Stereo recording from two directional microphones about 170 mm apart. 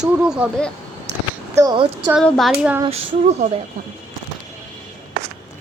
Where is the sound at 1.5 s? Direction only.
25° right (ahead or behind).